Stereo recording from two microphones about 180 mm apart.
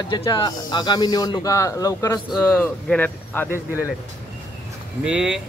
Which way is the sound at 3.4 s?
15° right (ahead or behind).